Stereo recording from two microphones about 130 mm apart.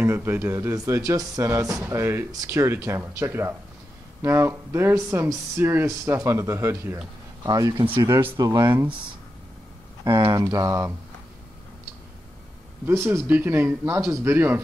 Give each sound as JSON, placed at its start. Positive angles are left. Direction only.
{"t": 0.0, "sound": "speech", "side_deg": -15}
{"t": 7.8, "sound": "speech", "side_deg": -40}
{"t": 8.1, "sound": "speech", "side_deg": -15}
{"t": 8.4, "sound": "speech", "side_deg": -30}
{"t": 10.0, "sound": "speech", "side_deg": -35}
{"t": 12.8, "sound": "speech", "side_deg": -20}